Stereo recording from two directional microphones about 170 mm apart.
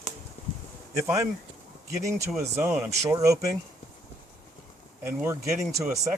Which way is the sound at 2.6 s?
15° right (ahead or behind).